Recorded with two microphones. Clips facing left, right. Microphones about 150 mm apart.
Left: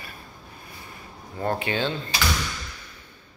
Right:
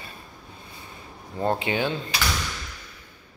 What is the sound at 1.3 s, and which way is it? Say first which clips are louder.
Speech: right 1 dB; 20° right (ahead or behind).